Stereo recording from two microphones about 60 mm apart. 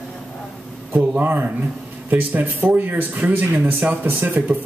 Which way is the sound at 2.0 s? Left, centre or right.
Right.